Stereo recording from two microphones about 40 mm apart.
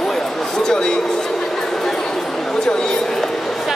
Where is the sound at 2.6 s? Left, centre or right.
Centre.